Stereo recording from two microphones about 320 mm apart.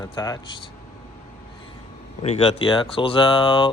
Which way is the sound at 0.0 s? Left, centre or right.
Centre.